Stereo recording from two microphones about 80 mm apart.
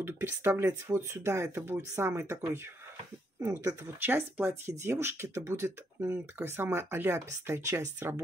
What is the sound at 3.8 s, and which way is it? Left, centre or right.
Speech, right.